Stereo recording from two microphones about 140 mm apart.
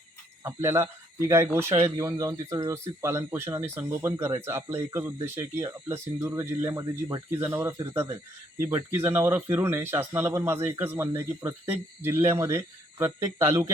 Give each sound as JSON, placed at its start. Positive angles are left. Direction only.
{"t": 0.4, "sound": "speech", "side_deg": -20}